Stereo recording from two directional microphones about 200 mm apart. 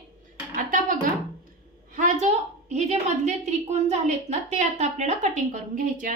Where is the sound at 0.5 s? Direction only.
40° right (ahead or behind).